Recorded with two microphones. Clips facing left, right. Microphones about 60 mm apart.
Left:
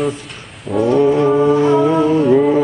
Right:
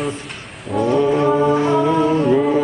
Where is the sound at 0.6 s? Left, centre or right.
Centre.